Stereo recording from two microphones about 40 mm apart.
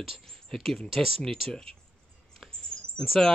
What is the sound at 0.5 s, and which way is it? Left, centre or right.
Speech, centre.